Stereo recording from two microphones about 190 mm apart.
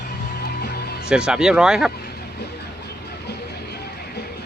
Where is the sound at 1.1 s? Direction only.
5° right (ahead or behind).